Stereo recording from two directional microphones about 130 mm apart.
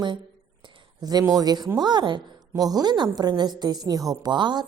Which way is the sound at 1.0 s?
25° right (ahead or behind).